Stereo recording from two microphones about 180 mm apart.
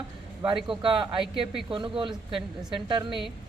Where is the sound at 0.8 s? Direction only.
30° right (ahead or behind).